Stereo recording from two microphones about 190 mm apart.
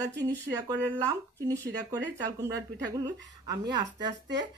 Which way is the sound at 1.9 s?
20° right (ahead or behind).